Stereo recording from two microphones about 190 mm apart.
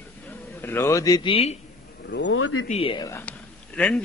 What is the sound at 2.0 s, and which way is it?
Speech, 65° left (ahead or behind).